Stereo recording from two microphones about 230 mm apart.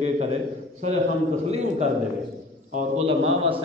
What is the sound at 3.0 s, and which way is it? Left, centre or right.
Speech, right.